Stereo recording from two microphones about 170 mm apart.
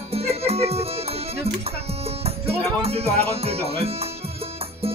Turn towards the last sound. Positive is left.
turn(degrees=-35)  # may be behind; listen again after turning